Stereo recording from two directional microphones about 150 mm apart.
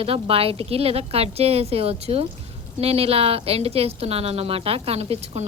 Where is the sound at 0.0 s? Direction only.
40° right (ahead or behind).